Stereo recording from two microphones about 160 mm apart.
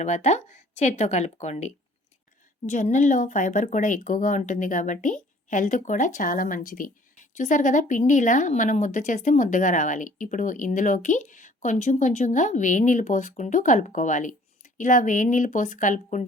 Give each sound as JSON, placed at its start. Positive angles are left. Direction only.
{"t": 0.0, "sound": "speech", "side_deg": 45}